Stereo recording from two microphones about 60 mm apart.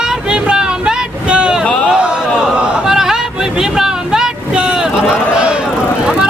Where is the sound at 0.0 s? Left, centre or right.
Centre.